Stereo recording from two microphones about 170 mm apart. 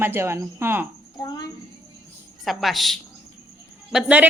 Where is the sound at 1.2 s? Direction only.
25° left (ahead or behind).